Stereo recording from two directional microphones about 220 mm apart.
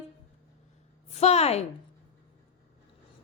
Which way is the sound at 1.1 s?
30° left (ahead or behind).